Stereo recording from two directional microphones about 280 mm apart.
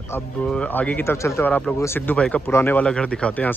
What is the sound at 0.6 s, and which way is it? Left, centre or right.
Speech, centre.